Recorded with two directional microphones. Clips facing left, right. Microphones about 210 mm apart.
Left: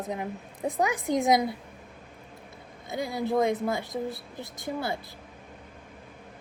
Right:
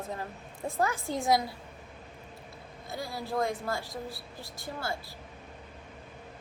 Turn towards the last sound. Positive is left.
turn(degrees=20)  # may be behind; listen again after turning